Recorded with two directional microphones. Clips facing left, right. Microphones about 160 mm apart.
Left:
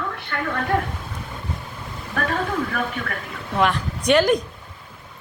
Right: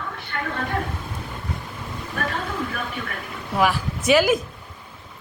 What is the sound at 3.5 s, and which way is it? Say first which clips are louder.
Speech: even; 5° right (ahead or behind).